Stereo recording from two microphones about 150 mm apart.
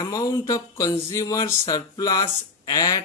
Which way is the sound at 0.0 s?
25° left (ahead or behind).